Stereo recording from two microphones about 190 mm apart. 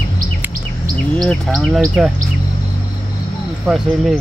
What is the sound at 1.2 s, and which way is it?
Speech, centre (ahead or behind).